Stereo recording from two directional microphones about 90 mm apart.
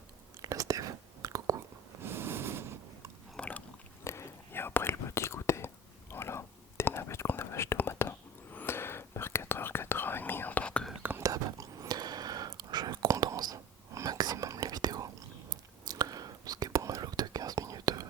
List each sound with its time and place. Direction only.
0.4 s whispering: 40° right (ahead or behind)
2.0 s a sound: 25° right (ahead or behind)
3.3 s biting: 15° left (ahead or behind)
4.0 s whispering: 30° left (ahead or behind); by 10.8 s 15° left (ahead or behind)
11.2 s whispering: 40° right (ahead or behind)